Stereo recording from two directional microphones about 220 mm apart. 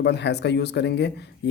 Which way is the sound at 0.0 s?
50° left (ahead or behind).